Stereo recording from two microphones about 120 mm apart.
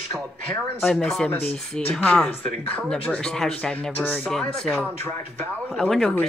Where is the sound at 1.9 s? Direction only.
10° left (ahead or behind).